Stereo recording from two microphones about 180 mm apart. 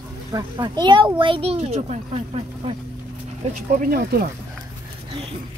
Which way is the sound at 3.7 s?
50° right (ahead or behind).